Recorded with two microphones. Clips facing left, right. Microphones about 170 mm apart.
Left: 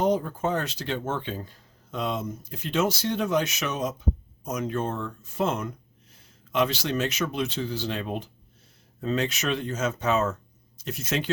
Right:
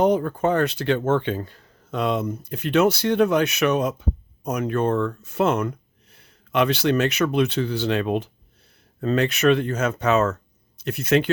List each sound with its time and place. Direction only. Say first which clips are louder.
0.0 s speech: right 5 dB; 65° right (ahead or behind)
9.0 s speech: right 6 dB; 60° right (ahead or behind)
10.8 s speech: right 9 dB; 60° right (ahead or behind)